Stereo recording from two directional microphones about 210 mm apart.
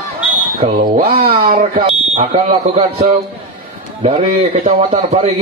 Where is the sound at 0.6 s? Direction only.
30° right (ahead or behind).